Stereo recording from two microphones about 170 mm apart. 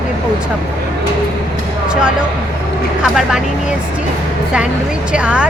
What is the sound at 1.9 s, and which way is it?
Speech, 5° right (ahead or behind).